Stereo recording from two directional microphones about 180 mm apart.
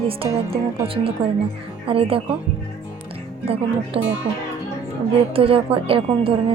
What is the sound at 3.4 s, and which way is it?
Speech, 35° right (ahead or behind).